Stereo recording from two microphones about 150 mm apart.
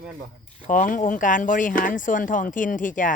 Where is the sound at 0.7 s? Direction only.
60° left (ahead or behind).